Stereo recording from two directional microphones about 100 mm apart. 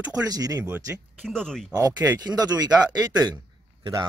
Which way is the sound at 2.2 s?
40° right (ahead or behind).